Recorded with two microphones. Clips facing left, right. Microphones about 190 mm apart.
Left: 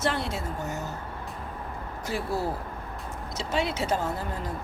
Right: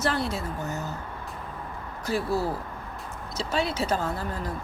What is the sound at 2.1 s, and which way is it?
Speech, 20° left (ahead or behind).